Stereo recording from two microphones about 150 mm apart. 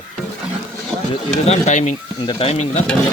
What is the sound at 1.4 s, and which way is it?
Speech, 50° left (ahead or behind).